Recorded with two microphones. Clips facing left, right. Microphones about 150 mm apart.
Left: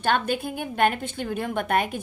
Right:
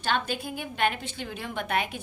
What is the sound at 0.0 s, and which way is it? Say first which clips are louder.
A woman's voice: left 5 dB; 50° left (ahead or behind).